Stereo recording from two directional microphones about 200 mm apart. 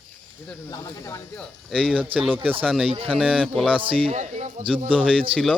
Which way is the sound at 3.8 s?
25° right (ahead or behind).